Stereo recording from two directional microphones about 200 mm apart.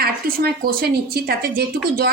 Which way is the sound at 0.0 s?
50° right (ahead or behind).